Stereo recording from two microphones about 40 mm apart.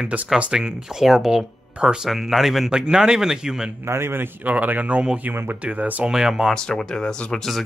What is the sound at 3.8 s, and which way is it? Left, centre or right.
Speech, right.